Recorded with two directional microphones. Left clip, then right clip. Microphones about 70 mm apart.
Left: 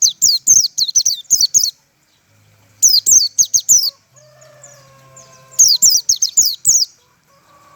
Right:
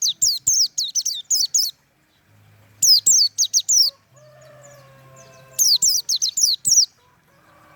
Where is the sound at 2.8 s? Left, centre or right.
Right.